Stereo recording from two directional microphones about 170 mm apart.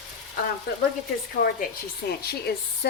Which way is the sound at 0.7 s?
65° left (ahead or behind).